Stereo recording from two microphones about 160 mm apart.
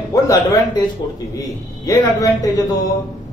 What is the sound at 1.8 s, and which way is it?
Speech, 20° left (ahead or behind).